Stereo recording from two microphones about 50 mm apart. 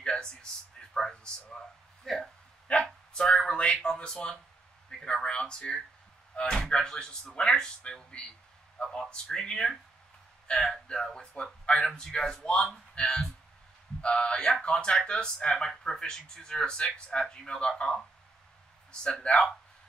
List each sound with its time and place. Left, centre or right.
0.0 s speech: centre
8.8 s speech: centre
11.4 s speech: left
11.8 s speech: centre
19.2 s speech: centre